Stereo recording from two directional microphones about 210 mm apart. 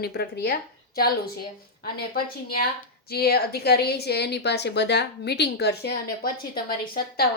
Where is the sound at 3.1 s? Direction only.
50° left (ahead or behind).